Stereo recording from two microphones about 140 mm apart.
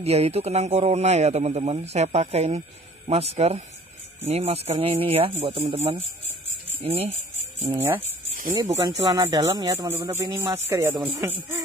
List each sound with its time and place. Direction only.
0.0 s a man's voice: 45° right (ahead or behind)
7.7 s speech: 15° right (ahead or behind)